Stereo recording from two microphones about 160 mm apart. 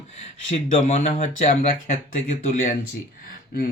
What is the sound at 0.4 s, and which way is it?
Speech, 45° left (ahead or behind).